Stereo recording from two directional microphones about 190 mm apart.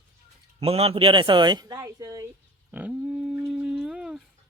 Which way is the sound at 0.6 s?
30° right (ahead or behind).